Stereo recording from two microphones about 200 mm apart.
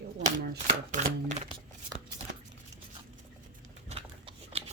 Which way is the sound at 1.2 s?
35° right (ahead or behind).